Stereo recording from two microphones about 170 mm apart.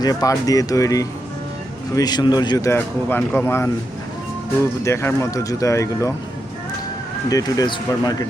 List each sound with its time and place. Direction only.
0.0 s speech: 20° left (ahead or behind)
4.8 s speech: 15° left (ahead or behind)
7.3 s speech: 20° left (ahead or behind)